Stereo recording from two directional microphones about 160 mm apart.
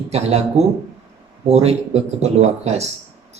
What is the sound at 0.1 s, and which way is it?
Speech, 40° right (ahead or behind).